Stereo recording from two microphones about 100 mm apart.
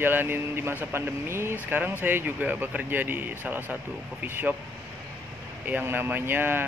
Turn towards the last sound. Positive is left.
turn(degrees=-20)  # may be behind; listen again after turning